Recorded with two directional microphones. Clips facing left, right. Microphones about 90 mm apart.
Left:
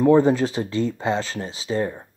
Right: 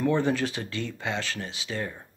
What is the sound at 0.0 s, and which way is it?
Speech, 30° left (ahead or behind).